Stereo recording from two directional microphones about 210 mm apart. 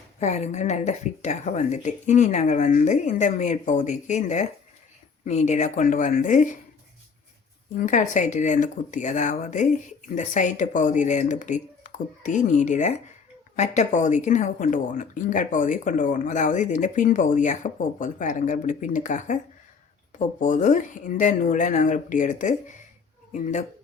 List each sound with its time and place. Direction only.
0.2 s speech: 30° left (ahead or behind)
7.8 s speech: 35° left (ahead or behind)